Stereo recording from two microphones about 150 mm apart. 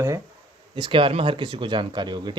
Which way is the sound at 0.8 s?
35° right (ahead or behind).